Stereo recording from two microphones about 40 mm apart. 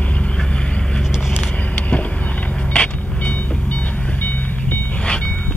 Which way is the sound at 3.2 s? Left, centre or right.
Left.